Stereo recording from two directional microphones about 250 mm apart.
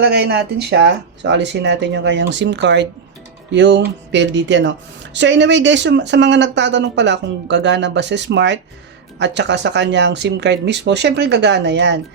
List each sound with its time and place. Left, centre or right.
0.0 s speech: right